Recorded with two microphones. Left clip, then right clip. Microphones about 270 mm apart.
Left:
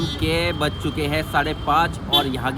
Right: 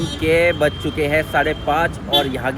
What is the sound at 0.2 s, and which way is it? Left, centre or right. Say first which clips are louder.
Speech: right 8 dB; centre.